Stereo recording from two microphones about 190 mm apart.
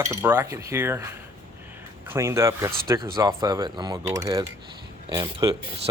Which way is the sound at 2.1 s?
15° right (ahead or behind).